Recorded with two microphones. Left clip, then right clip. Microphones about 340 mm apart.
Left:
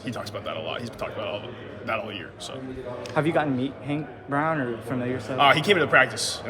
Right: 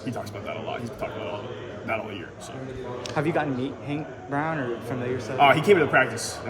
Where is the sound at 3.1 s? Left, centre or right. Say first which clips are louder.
Left 2 dB; left.